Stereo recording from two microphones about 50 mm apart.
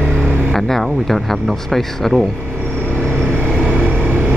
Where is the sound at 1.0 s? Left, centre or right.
Centre.